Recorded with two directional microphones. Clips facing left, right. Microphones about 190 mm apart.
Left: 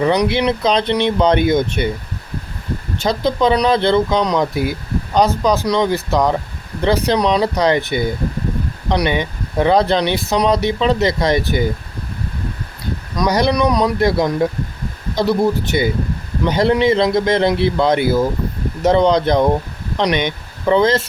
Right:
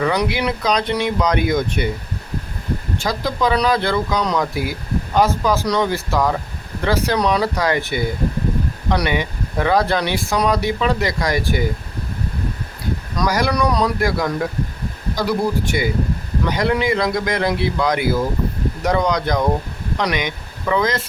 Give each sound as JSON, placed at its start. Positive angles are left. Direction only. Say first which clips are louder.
{"t": 0.0, "sound": "speech", "louder": "left 4 dB", "side_deg": 25}
{"t": 3.0, "sound": "speech", "louder": "left 6 dB", "side_deg": 25}
{"t": 13.1, "sound": "speech", "louder": "left 4 dB", "side_deg": 20}